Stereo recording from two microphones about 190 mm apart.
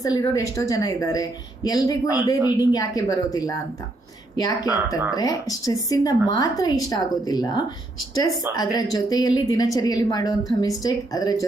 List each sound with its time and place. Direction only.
0.0 s a woman's voice: 20° left (ahead or behind)